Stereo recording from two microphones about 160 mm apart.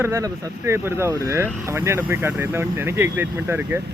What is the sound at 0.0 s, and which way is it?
Speech, 20° right (ahead or behind).